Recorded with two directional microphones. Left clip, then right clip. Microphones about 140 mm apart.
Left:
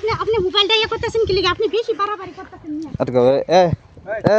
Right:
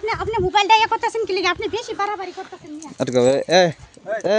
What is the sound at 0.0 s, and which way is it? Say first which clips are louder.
Speech: left 3 dB; 35° right (ahead or behind).